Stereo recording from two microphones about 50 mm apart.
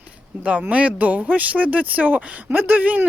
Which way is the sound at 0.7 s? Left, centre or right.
Right.